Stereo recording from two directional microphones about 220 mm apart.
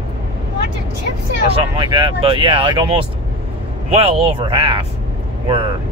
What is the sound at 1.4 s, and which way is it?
Speech, 25° right (ahead or behind).